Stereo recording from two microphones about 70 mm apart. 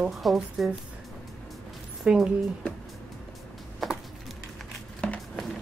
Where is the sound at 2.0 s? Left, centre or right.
Centre.